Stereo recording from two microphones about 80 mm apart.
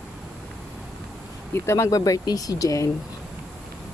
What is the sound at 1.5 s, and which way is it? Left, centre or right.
Speech, left.